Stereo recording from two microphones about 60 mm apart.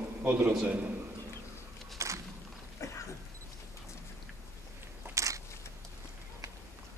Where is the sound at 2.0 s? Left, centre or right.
Right.